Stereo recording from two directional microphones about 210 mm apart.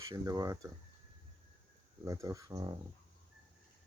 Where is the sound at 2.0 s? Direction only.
15° right (ahead or behind).